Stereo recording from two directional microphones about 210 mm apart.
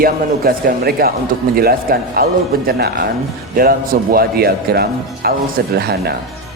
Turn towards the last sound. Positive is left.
turn(degrees=-50)  # may be behind; listen again after turning